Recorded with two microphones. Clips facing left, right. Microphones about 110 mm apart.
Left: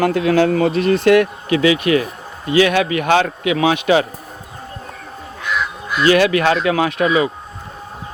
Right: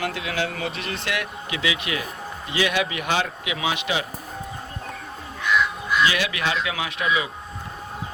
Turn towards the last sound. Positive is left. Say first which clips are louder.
# left 9 dB
turn(degrees=50)  # may be behind; listen again after turning